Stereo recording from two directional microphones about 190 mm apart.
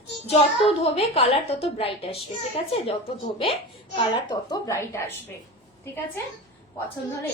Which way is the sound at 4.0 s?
20° left (ahead or behind).